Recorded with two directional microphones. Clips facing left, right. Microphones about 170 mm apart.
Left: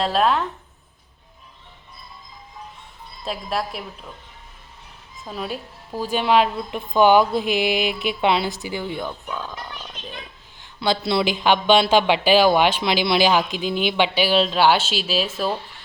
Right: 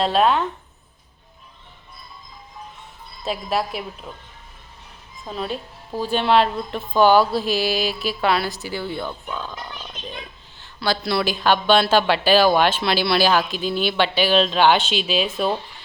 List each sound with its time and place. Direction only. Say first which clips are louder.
0.0 s speech: right 2 dB; centre (ahead or behind)
3.2 s speech: right 2 dB; centre (ahead or behind)
5.2 s speech: right 2 dB; 5° left (ahead or behind)
10.6 s speech: left 1 dB; 20° left (ahead or behind); by 15.4 s centre (ahead or behind)